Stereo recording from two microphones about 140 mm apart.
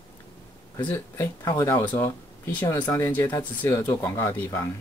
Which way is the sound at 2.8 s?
15° left (ahead or behind).